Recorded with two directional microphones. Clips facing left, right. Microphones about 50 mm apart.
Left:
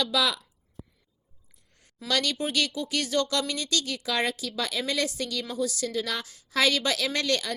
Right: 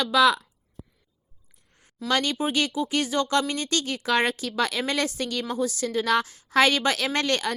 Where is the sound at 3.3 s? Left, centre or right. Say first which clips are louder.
Right 4 dB; right.